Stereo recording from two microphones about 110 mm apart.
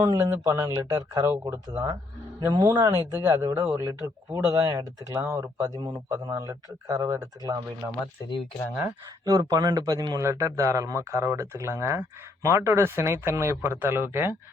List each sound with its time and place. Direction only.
0.0 s a man's voice: 35° right (ahead or behind)
8.8 s a man's voice: 35° right (ahead or behind)